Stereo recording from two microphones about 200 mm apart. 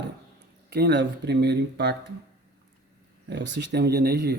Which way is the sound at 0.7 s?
55° right (ahead or behind).